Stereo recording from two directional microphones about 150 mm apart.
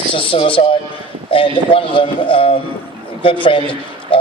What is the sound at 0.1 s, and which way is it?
A man's voice, 35° left (ahead or behind).